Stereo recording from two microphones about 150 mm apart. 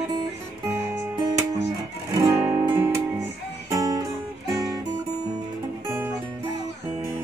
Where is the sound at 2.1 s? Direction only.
15° right (ahead or behind).